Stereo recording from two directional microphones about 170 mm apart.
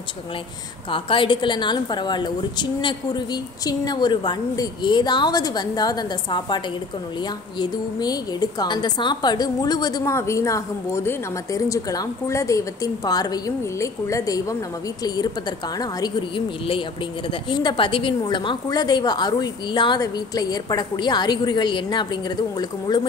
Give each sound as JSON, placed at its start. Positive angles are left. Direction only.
{"t": 0.9, "sound": "a woman's voice", "side_deg": 30}